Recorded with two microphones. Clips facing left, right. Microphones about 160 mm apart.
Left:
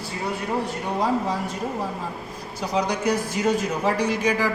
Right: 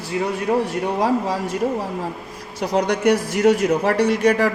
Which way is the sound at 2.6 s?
75° right (ahead or behind).